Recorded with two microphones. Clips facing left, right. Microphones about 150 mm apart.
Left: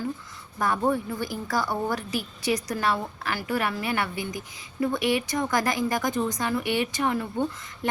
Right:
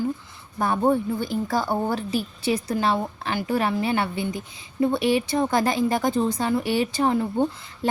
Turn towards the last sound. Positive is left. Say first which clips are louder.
# right 4 dB
turn(degrees=-30)  # may be behind; listen again after turning